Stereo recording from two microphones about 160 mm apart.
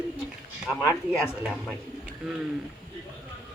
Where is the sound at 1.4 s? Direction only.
5° right (ahead or behind).